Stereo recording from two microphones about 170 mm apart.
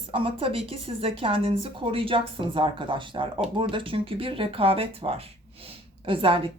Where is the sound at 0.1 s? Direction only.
30° right (ahead or behind).